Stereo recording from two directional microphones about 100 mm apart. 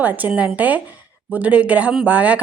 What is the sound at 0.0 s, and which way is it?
A woman's voice, 15° right (ahead or behind).